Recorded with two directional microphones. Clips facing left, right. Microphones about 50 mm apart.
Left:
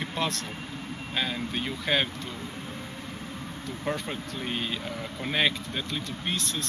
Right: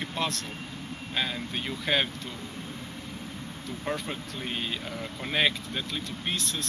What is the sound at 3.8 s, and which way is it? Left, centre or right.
Speech, centre.